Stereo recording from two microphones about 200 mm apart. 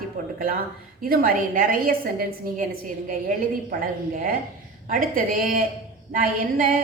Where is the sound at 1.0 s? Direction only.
45° right (ahead or behind).